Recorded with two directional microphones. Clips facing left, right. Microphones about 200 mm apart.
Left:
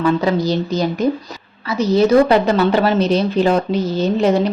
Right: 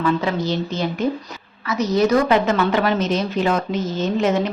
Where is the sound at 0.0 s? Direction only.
40° left (ahead or behind).